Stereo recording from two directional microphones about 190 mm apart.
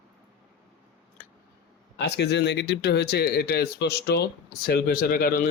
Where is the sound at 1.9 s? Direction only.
65° left (ahead or behind).